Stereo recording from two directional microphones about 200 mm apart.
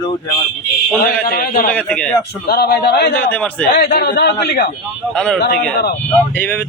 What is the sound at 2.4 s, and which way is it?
Speech, 55° left (ahead or behind).